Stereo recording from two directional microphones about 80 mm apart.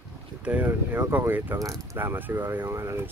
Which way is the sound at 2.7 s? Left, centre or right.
Right.